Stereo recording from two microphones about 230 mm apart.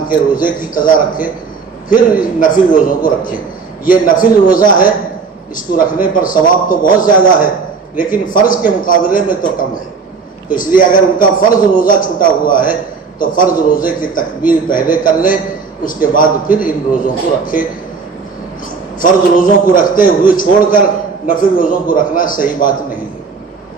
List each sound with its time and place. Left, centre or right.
0.1 s a man's voice: left
18.9 s a man's voice: left